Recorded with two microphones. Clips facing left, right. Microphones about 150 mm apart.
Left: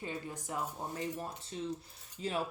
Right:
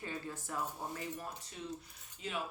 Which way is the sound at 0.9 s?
30° left (ahead or behind).